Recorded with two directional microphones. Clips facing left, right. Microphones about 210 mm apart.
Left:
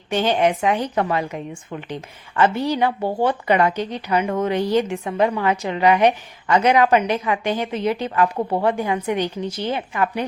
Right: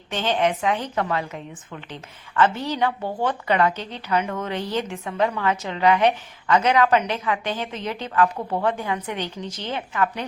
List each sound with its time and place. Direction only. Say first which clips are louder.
0.1 s a woman's voice: left 4 dB; 10° left (ahead or behind)
8.4 s a woman's voice: left 5 dB; 25° left (ahead or behind)
8.6 s a woman's voice: left 3 dB; 10° left (ahead or behind)